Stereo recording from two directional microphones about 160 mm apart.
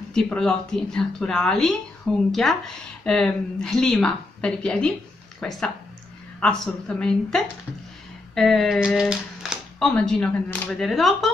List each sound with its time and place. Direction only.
0.1 s speech: 5° left (ahead or behind)